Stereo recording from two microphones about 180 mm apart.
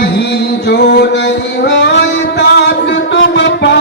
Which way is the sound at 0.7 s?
65° left (ahead or behind).